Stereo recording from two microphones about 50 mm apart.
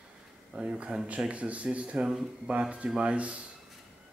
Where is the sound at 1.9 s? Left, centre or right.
Centre.